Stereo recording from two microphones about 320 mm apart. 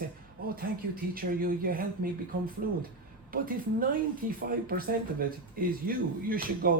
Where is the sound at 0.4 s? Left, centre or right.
Right.